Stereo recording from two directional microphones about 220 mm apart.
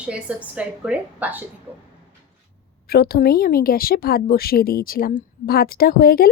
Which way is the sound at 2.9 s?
45° left (ahead or behind).